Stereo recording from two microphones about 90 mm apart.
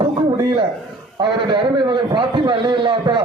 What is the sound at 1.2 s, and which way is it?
A man's voice, 60° right (ahead or behind).